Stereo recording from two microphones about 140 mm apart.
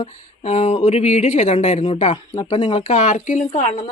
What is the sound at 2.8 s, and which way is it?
Speech, 55° left (ahead or behind).